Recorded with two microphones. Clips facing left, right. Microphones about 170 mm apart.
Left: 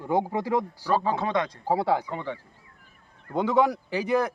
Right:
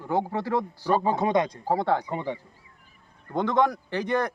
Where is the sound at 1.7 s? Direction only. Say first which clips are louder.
Left 1 dB; 5° left (ahead or behind).